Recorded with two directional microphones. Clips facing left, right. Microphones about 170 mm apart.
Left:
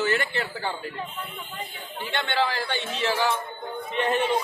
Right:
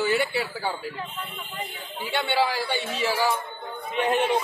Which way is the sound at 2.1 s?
10° right (ahead or behind).